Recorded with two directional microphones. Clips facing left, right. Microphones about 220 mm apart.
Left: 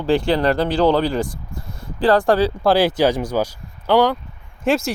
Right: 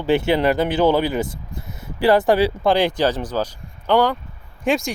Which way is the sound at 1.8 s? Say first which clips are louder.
Even; 10° right (ahead or behind).